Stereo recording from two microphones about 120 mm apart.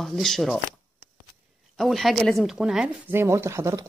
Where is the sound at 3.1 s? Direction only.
20° right (ahead or behind).